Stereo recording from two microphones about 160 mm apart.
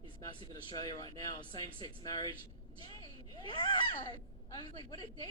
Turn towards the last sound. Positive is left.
turn(degrees=25)  # may be behind; listen again after turning